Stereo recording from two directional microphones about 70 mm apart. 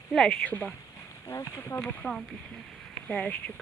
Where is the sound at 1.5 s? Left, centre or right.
Left.